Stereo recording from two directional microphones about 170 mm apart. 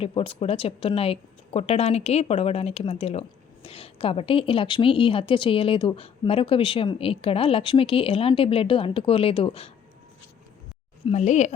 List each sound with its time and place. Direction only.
0.0 s speech: 35° left (ahead or behind)
11.0 s speech: 40° left (ahead or behind)